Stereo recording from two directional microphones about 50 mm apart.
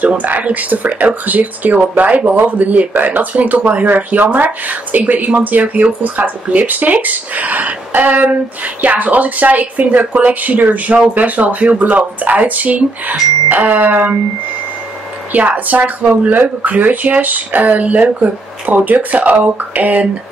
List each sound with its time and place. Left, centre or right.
0.2 s speech: right
15.3 s speech: right